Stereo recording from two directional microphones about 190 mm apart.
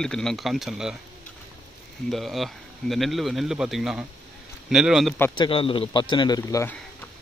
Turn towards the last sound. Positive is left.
turn(degrees=15)  # may be behind; listen again after turning